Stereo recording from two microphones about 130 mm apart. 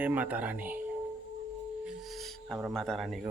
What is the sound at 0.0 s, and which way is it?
Speech, 10° right (ahead or behind).